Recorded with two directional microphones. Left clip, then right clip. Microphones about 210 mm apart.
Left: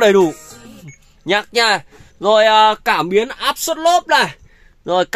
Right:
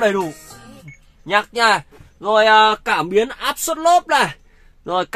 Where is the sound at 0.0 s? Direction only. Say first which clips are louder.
Left 6 dB; 40° left (ahead or behind).